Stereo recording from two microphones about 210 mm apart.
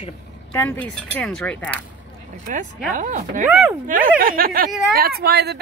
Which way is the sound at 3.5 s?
10° right (ahead or behind).